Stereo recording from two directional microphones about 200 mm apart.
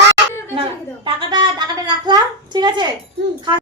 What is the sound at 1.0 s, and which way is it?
Speech, 20° right (ahead or behind).